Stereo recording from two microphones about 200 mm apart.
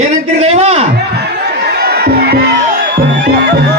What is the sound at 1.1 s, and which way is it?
Music, 55° right (ahead or behind).